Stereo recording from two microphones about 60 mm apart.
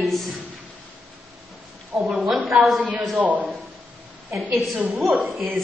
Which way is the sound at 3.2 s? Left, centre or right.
Right.